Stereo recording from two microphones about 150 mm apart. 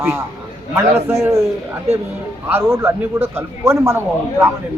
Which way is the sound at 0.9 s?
15° right (ahead or behind).